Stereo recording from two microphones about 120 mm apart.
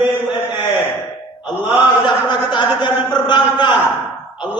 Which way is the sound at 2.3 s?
40° left (ahead or behind).